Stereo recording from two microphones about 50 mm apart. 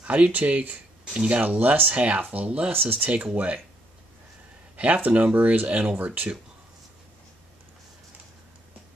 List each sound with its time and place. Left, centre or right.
0.0 s speech: right
1.4 s speech: right
2.7 s speech: right
4.7 s speech: right